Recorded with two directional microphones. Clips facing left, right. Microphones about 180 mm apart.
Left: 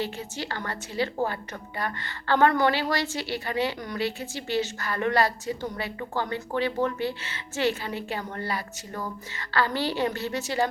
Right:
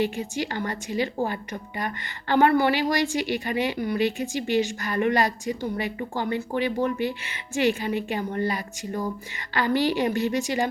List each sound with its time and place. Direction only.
0.0 s a woman's voice: 15° right (ahead or behind)